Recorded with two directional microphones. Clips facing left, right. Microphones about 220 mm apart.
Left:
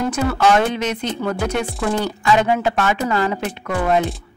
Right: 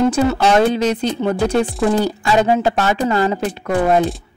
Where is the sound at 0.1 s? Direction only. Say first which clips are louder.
Right 2 dB; 30° right (ahead or behind).